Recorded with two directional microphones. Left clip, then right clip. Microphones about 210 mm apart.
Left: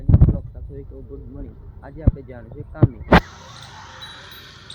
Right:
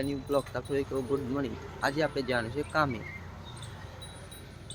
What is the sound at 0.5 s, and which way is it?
Speech, 15° right (ahead or behind).